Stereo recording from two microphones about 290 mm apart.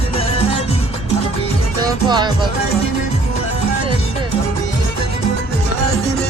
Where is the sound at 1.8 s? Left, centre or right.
Centre.